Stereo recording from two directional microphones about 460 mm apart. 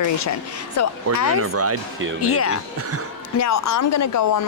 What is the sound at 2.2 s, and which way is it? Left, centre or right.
Speech, left.